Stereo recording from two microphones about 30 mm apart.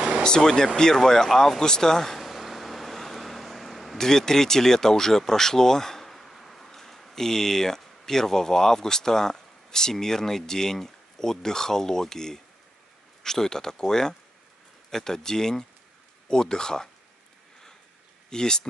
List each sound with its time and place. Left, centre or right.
0.2 s speech: left
2.1 s vehicle: centre
4.0 s speech: centre
18.3 s speech: left